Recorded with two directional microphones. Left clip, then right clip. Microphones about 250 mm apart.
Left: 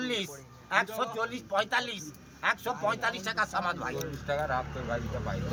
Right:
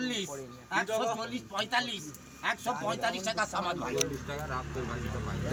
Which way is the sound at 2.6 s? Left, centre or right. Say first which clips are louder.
Left 2 dB; centre.